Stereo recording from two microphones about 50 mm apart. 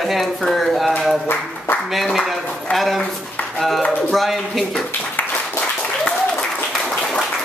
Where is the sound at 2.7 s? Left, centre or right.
Centre.